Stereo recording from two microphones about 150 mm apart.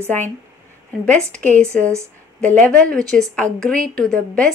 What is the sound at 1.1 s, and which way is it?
A woman's voice, 5° left (ahead or behind).